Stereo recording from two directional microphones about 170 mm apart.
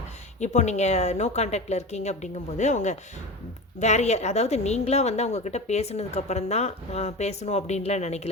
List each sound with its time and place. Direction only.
0.3 s a woman's voice: 45° left (ahead or behind)